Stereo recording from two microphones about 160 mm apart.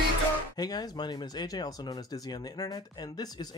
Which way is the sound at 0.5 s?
25° left (ahead or behind).